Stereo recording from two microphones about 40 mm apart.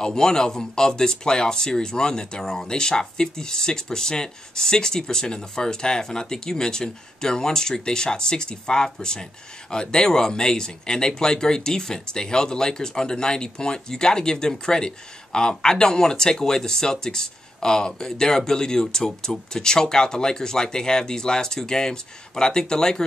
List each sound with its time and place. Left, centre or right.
0.0 s speech: centre